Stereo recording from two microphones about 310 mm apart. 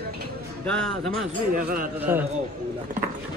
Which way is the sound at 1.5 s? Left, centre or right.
Right.